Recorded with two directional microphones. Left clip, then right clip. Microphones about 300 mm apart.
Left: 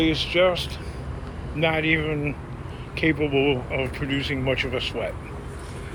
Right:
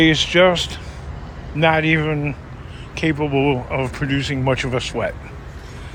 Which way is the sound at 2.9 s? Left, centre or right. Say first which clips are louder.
Right 2 dB; centre.